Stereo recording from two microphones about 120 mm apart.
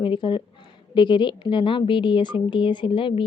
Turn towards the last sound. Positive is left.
turn(degrees=45)  # may be behind; listen again after turning